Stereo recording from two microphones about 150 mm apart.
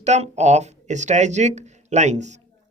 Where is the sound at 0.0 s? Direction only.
50° right (ahead or behind).